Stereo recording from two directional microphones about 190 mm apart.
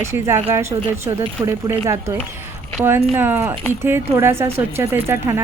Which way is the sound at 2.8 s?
10° right (ahead or behind).